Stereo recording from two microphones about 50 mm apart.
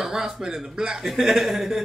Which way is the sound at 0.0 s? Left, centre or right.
Centre.